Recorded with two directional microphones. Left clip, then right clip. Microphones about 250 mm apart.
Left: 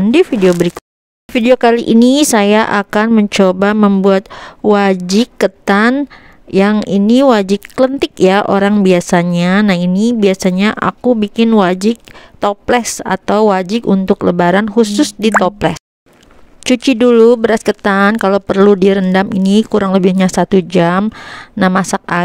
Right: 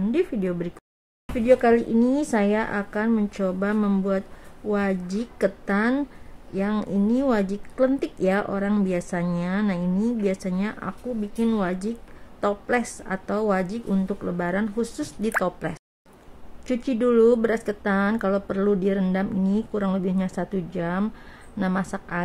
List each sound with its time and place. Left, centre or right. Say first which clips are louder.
0.1 s a woman's voice: left 16 dB; left